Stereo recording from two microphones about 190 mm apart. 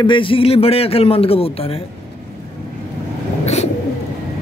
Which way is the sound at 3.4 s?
35° left (ahead or behind).